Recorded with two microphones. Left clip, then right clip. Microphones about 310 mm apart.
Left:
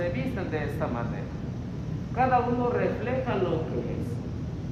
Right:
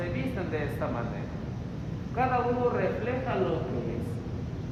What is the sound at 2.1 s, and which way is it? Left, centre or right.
Vehicle, left.